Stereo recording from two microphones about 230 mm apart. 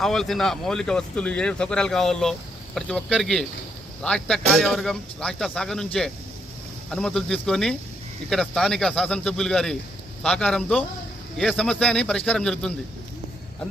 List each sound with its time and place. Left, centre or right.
0.0 s speech: centre